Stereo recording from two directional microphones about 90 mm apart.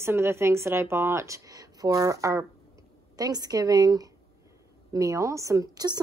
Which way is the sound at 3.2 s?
45° right (ahead or behind).